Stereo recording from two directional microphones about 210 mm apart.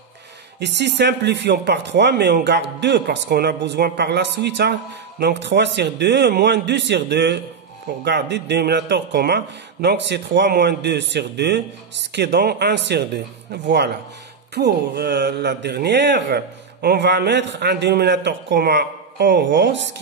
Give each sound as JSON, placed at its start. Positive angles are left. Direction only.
{"t": 0.6, "sound": "a man's voice", "side_deg": -55}